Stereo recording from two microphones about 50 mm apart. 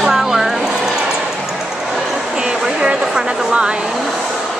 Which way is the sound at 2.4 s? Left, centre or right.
Centre.